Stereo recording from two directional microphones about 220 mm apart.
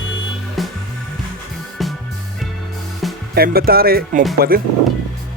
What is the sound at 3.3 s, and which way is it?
Speech, 45° right (ahead or behind).